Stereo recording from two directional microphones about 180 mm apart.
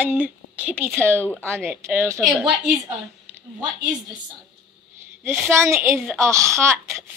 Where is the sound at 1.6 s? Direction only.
10° right (ahead or behind).